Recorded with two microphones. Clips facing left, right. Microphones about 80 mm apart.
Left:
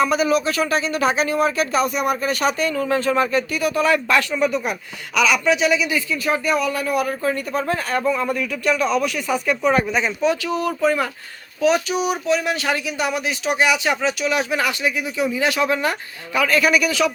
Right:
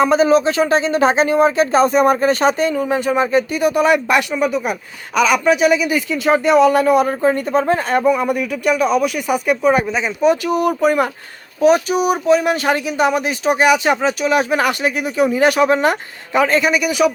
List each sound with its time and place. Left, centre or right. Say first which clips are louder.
0.0 s speech: right 5 dB; right; by 4.7 s centre
5.1 s speech: right 4 dB; right
6.2 s speech: right 10 dB; right
11.6 s speech: right 5 dB; right; by 17.1 s centre